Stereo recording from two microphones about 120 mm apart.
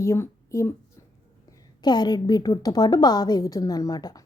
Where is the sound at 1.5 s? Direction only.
35° left (ahead or behind).